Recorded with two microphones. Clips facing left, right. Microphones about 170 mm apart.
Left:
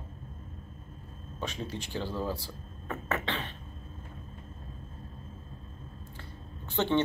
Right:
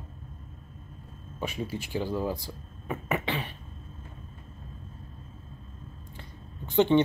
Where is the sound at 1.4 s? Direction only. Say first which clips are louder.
Right 3 dB; 10° right (ahead or behind).